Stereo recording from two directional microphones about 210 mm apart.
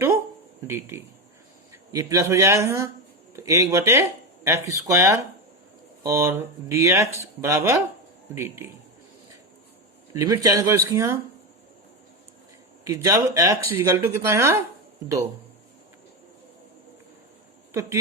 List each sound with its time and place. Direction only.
0.7 s speech: 10° right (ahead or behind)
10.1 s speech: 15° right (ahead or behind)
12.8 s speech: 15° right (ahead or behind)